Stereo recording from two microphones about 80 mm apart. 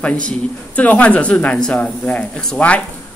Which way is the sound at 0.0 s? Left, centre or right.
Centre.